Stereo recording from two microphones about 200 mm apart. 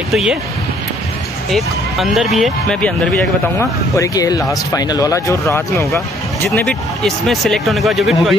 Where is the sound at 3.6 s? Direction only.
15° left (ahead or behind).